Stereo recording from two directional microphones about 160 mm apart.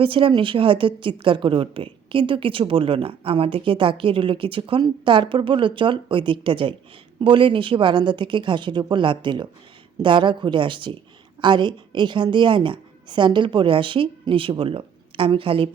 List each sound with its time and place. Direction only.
0.0 s a woman's voice: 35° right (ahead or behind)